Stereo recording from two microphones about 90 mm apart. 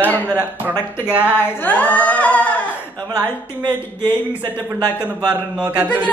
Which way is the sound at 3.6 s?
25° left (ahead or behind).